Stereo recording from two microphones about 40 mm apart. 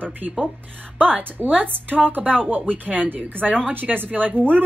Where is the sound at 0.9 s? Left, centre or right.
Right.